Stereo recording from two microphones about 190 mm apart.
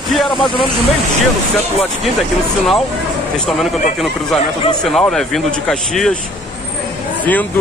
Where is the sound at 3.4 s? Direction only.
Centre (ahead or behind).